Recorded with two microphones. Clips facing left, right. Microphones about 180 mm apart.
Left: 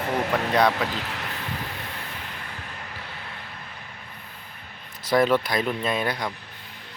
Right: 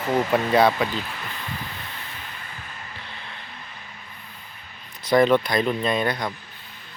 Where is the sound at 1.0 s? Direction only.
75° left (ahead or behind).